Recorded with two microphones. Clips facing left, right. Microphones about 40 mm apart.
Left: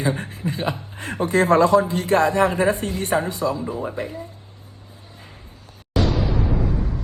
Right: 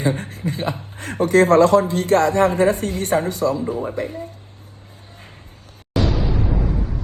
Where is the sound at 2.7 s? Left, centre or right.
Right.